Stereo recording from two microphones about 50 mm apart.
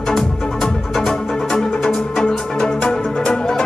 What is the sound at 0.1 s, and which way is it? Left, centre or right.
Music, centre.